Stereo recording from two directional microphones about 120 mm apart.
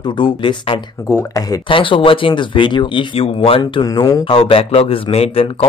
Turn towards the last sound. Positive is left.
turn(degrees=50)  # may be behind; listen again after turning